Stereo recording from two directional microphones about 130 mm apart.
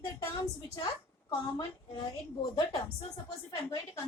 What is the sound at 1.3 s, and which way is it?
Speech, 30° left (ahead or behind).